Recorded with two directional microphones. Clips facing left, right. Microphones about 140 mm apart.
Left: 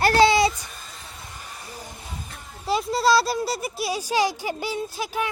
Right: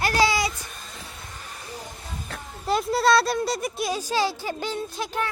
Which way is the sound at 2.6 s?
Centre (ahead or behind).